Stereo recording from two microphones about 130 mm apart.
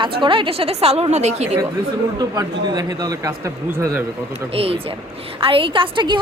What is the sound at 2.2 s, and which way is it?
Speech, 30° right (ahead or behind).